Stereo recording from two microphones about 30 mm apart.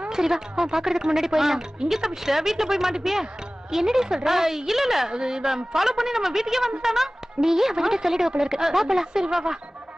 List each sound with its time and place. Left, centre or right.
0.1 s a woman's voice: centre
5.1 s a woman's voice: right